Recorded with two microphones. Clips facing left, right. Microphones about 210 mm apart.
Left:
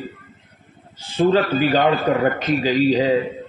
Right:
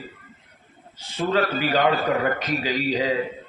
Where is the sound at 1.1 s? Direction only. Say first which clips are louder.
Left 6 dB; 30° left (ahead or behind).